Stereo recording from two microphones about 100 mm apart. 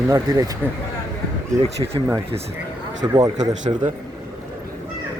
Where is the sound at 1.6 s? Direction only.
70° right (ahead or behind).